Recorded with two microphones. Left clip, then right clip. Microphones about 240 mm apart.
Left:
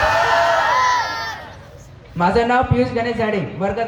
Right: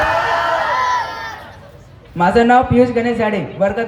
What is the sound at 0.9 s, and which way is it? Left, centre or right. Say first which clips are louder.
Crowd: even; left.